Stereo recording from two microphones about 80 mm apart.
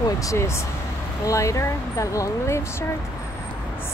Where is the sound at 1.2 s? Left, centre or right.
Left.